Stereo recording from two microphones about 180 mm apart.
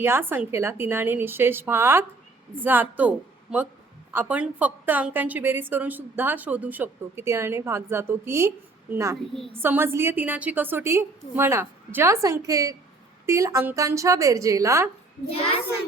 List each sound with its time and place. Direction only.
0.0 s a woman's voice: 10° right (ahead or behind)